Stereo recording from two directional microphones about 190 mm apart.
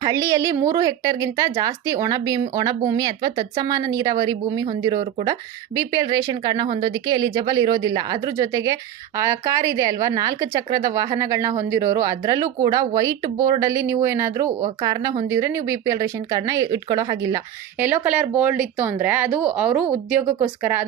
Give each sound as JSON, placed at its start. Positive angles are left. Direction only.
{"t": 0.0, "sound": "a woman's voice", "side_deg": -15}